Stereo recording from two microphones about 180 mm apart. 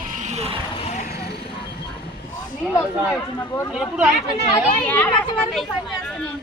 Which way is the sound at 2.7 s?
15° left (ahead or behind).